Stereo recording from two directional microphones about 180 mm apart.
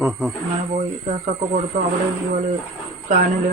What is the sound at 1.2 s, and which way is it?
Speech, 45° right (ahead or behind).